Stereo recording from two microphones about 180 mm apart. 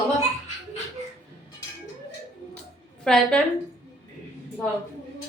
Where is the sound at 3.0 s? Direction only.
5° left (ahead or behind).